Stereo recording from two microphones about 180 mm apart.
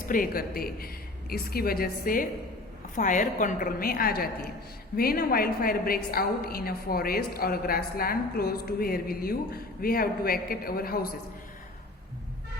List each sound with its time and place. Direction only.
0.1 s a woman's voice: 55° left (ahead or behind)